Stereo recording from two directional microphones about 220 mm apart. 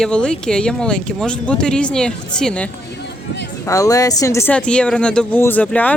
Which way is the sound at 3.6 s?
15° left (ahead or behind).